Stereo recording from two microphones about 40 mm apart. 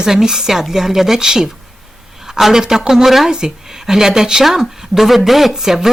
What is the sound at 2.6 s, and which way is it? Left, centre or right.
A woman's voice, centre.